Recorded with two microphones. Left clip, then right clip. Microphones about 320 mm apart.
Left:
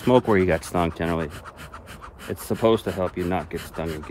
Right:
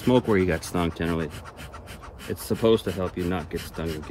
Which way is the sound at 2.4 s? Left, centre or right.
Left.